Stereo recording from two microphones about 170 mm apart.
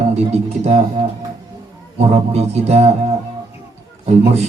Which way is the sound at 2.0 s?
40° right (ahead or behind).